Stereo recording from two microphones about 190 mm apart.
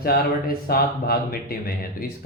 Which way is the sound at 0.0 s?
55° left (ahead or behind).